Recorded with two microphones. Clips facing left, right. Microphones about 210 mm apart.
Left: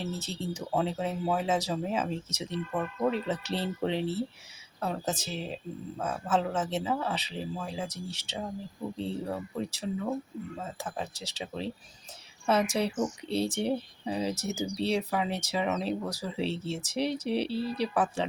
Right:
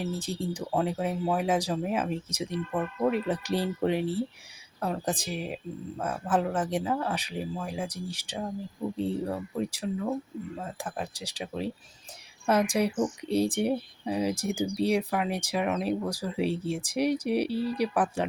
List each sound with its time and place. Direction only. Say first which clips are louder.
0.0 s speech: right 3 dB; 10° right (ahead or behind)
12.7 s speech: right 3 dB; 10° right (ahead or behind)